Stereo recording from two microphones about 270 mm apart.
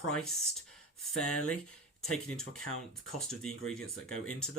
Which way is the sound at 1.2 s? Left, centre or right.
Left.